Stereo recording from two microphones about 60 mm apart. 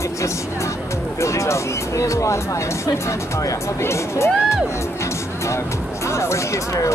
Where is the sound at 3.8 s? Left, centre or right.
Left.